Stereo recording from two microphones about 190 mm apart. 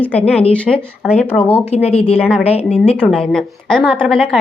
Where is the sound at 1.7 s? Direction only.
35° left (ahead or behind).